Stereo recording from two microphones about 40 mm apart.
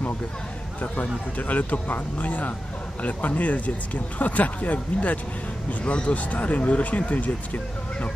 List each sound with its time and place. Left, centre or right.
1.5 s speech: left